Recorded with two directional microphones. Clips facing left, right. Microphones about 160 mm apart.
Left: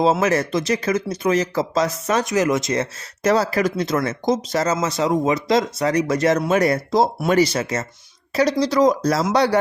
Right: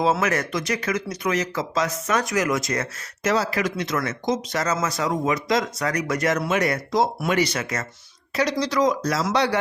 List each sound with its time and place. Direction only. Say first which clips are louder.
0.0 s speech: left 4 dB; 30° left (ahead or behind)
3.2 s speech: left 5 dB; 35° left (ahead or behind)